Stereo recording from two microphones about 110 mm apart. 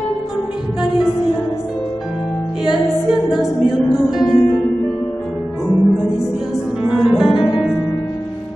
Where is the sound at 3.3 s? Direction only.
5° right (ahead or behind).